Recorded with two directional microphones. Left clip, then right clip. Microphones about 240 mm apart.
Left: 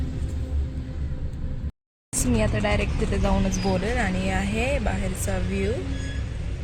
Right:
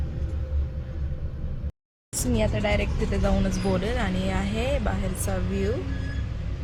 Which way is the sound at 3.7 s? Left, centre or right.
Right.